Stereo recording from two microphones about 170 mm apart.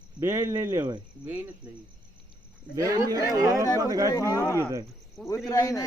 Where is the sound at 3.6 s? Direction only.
20° left (ahead or behind).